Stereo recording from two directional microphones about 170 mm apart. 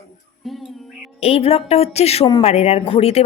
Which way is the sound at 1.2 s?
35° left (ahead or behind).